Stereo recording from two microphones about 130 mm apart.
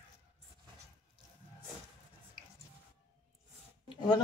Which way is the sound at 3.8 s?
35° left (ahead or behind).